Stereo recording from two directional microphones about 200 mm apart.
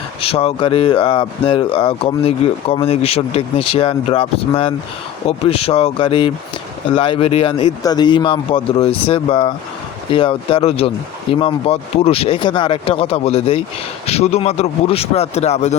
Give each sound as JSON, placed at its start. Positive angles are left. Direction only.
{"t": 0.2, "sound": "speech", "side_deg": 30}